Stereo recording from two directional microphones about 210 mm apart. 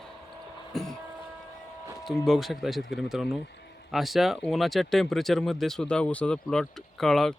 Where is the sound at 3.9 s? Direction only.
Centre (ahead or behind).